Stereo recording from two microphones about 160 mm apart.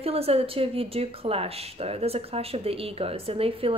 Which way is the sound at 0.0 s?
35° right (ahead or behind).